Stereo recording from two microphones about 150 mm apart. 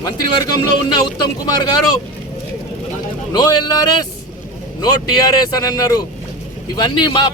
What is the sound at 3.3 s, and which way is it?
Speech, 25° left (ahead or behind).